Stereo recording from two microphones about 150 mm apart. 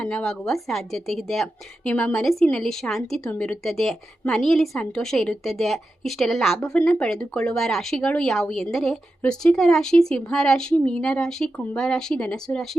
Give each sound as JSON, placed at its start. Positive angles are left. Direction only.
{"t": 0.0, "sound": "speech", "side_deg": 5}